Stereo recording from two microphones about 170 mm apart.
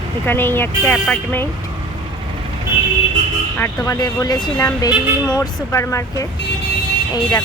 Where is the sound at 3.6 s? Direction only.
15° left (ahead or behind).